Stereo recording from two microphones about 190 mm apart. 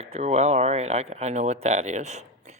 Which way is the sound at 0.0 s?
35° right (ahead or behind).